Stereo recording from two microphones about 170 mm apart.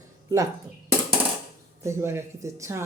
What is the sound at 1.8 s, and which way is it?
A woman's voice, 15° right (ahead or behind).